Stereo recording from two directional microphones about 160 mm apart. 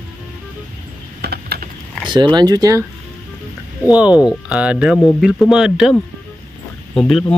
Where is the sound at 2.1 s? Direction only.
30° right (ahead or behind).